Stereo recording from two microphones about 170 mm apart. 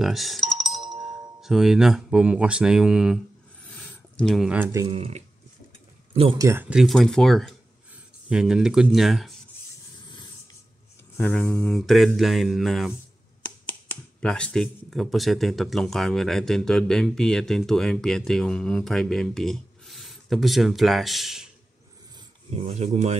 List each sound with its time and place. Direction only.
0.0 s speech: centre (ahead or behind)
3.6 s a sound: 10° left (ahead or behind)
4.7 s speech: 30° right (ahead or behind)
6.3 s speech: 15° right (ahead or behind); by 9.3 s centre (ahead or behind)
11.1 s speech: 5° left (ahead or behind)
13.4 s speech: 10° left (ahead or behind)
22.5 s speech: 35° right (ahead or behind)